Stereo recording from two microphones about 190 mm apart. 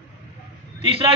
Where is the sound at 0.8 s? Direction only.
30° right (ahead or behind).